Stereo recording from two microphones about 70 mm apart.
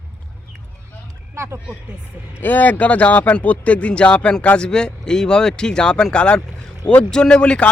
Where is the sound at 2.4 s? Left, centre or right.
Left.